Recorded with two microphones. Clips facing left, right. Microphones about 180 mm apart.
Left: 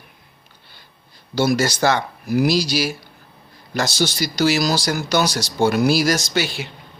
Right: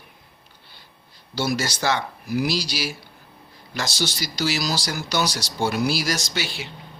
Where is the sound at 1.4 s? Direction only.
50° left (ahead or behind).